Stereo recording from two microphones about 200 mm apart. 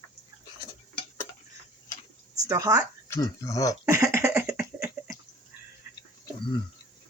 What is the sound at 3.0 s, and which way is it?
Speech, 15° left (ahead or behind).